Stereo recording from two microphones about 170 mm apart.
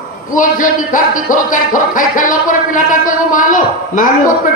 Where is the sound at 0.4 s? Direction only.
50° left (ahead or behind).